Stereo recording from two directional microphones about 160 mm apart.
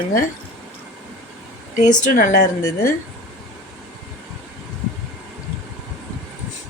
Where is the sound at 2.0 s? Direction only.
55° left (ahead or behind).